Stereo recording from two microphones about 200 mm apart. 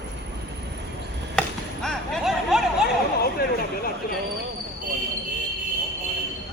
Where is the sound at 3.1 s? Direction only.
50° left (ahead or behind).